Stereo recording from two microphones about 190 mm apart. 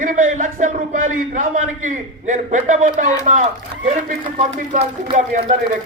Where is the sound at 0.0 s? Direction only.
45° right (ahead or behind).